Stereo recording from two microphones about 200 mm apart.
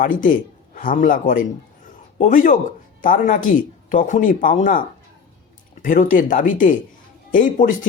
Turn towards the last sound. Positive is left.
turn(degrees=40)  # may be behind; listen again after turning